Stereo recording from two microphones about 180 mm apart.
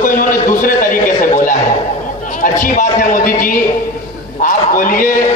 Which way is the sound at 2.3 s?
45° left (ahead or behind).